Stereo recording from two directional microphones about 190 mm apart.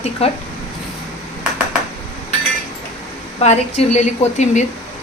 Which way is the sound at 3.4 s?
35° left (ahead or behind).